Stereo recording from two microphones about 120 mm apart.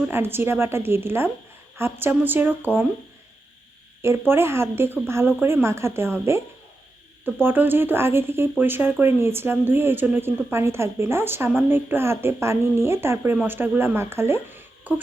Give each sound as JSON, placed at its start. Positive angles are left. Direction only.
{"t": 0.1, "sound": "a woman's voice", "side_deg": -20}
{"t": 4.3, "sound": "speech", "side_deg": -20}
{"t": 7.4, "sound": "speech", "side_deg": -15}